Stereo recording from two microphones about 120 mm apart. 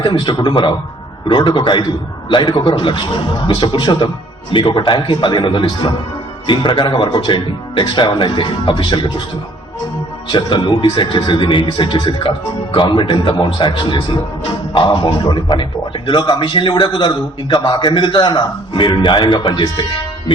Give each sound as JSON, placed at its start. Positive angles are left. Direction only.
{"t": 0.0, "sound": "a man's voice", "side_deg": 40}
{"t": 10.3, "sound": "a man's voice", "side_deg": 40}